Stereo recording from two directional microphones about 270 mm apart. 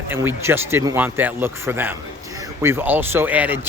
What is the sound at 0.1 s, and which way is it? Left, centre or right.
Speech, centre.